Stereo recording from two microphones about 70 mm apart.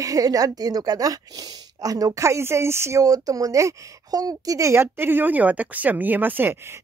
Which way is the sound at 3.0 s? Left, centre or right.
Right.